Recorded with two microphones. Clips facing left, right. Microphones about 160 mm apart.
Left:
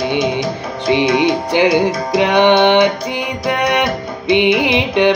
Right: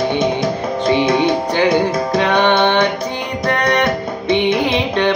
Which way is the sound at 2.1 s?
15° left (ahead or behind).